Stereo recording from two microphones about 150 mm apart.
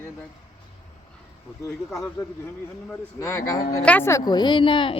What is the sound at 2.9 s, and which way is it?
A woman's voice, 20° left (ahead or behind).